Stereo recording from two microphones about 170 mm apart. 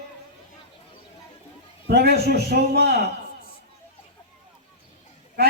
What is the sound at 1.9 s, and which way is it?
A man's voice, 70° right (ahead or behind).